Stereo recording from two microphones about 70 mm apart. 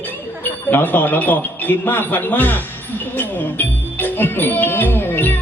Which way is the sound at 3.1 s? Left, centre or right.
Left.